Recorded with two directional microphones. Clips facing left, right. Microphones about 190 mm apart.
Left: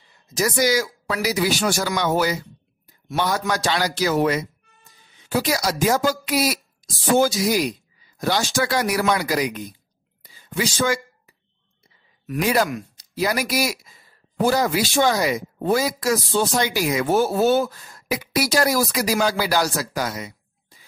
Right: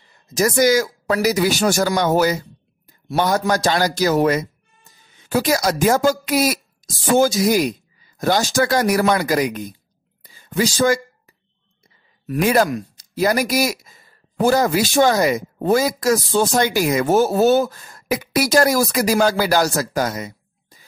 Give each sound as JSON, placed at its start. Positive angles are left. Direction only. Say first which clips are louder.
{"t": 0.3, "sound": "speech", "louder": "right 5 dB", "side_deg": -45}
{"t": 10.2, "sound": "whispering", "louder": "right 4 dB", "side_deg": -45}
{"t": 10.6, "sound": "a woman's voice", "louder": "right 5 dB", "side_deg": -35}
{"t": 12.3, "sound": "speech", "louder": "right 4 dB", "side_deg": -50}